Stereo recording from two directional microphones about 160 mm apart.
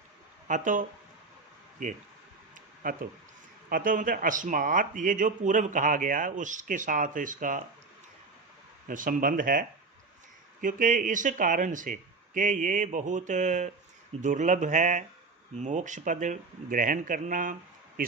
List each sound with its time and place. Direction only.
0.4 s speech: 55° right (ahead or behind)
8.9 s speech: 60° right (ahead or behind)